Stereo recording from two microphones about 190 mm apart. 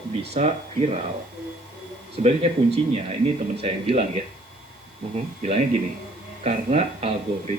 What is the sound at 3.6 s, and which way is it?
Speech, 30° right (ahead or behind).